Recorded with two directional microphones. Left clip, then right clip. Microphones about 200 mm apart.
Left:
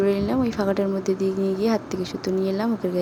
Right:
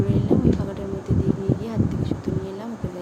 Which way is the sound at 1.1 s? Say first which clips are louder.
Left 3 dB; 35° left (ahead or behind).